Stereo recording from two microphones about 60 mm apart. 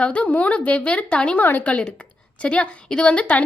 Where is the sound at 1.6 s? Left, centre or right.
Centre.